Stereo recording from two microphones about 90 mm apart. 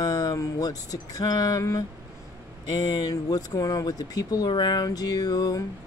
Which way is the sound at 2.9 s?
45° left (ahead or behind).